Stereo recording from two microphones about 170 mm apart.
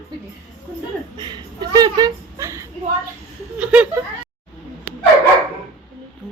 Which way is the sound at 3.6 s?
5° right (ahead or behind).